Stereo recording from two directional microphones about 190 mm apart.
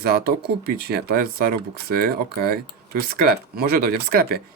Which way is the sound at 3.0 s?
55° right (ahead or behind).